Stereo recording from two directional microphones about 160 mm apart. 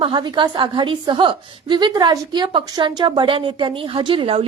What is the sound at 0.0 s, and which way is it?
A woman's voice, 30° right (ahead or behind).